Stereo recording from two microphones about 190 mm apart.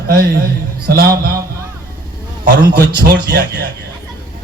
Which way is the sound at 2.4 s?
55° right (ahead or behind).